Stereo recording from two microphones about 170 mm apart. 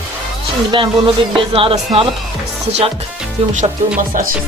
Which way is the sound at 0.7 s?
30° right (ahead or behind).